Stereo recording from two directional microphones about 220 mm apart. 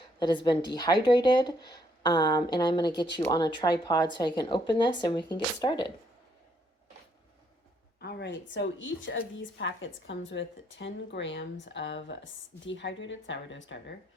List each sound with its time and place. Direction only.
0.2 s speech: 20° left (ahead or behind)
8.0 s a woman's voice: 50° left (ahead or behind)